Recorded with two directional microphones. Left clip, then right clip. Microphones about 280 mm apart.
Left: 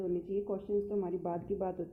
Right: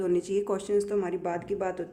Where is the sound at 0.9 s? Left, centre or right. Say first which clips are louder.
Right 6 dB; centre.